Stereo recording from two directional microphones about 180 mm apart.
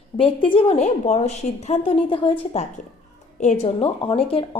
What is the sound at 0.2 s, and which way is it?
A woman's voice, 30° left (ahead or behind).